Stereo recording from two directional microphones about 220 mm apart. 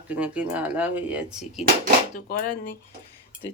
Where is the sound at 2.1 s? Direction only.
40° left (ahead or behind).